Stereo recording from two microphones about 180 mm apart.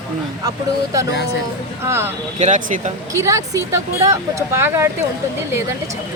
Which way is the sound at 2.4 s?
45° right (ahead or behind).